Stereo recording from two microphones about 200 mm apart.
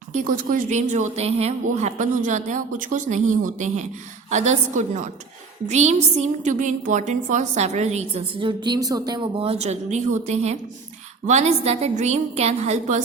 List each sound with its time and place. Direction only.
0.1 s a woman's voice: 40° right (ahead or behind)